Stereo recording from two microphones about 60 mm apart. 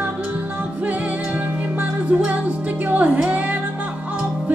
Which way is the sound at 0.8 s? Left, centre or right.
Right.